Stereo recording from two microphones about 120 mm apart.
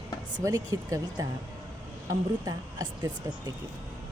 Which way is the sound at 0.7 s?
30° right (ahead or behind).